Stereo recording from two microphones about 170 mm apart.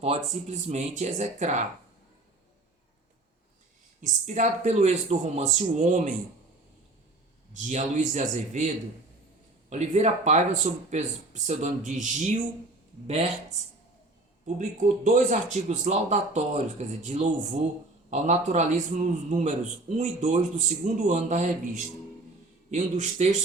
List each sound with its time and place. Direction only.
0.4 s a man's voice: 40° right (ahead or behind)
4.0 s a man's voice: 45° right (ahead or behind)
7.5 s a man's voice: 45° right (ahead or behind)
14.4 s a man's voice: 45° right (ahead or behind)